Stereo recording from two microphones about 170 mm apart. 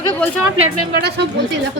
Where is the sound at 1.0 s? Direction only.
75° right (ahead or behind).